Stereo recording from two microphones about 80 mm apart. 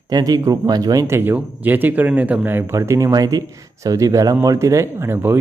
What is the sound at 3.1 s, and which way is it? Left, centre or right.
Speech, right.